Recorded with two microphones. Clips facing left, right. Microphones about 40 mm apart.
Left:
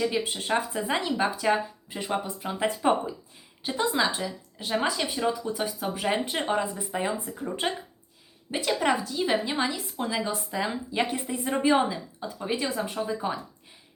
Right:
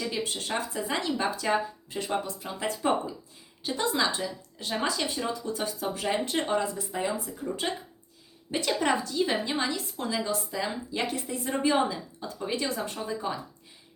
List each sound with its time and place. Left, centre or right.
0.0 s a woman's voice: centre
8.4 s a woman's voice: centre